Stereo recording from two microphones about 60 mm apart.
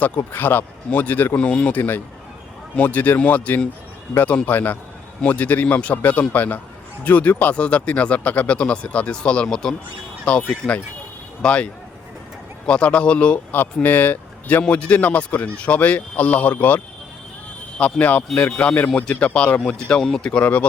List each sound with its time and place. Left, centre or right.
0.3 s speech: left
1.4 s speech: centre
20.0 s speech: centre
20.4 s speech: left